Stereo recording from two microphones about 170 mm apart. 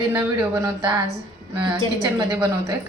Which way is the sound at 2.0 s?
25° right (ahead or behind).